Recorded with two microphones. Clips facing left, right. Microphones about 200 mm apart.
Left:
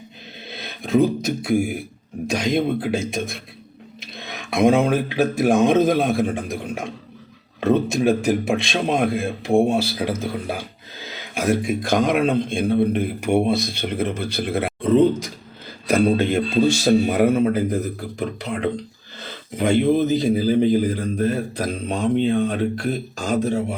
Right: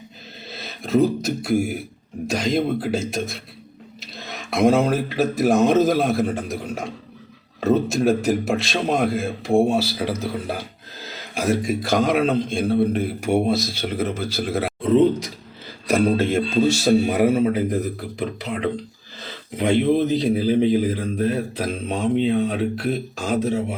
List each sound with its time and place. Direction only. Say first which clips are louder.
0.8 s speech: left 1 dB; centre (ahead or behind)
4.0 s a sound: even; 55° left (ahead or behind)
4.4 s a sound: left 1 dB; centre (ahead or behind)
4.9 s speech: left 1 dB; centre (ahead or behind)
11.9 s speech: even; 55° left (ahead or behind)
12.5 s speech: left 1 dB; centre (ahead or behind)